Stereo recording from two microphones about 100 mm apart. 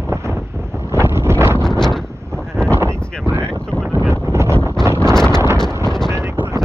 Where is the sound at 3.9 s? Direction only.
25° right (ahead or behind).